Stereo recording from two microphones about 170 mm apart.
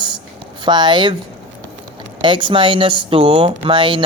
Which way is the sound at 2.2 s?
30° right (ahead or behind).